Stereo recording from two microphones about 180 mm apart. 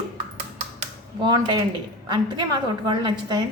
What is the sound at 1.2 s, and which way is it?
A woman's voice, 25° right (ahead or behind).